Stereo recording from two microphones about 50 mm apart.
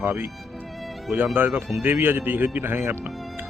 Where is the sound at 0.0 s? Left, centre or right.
Right.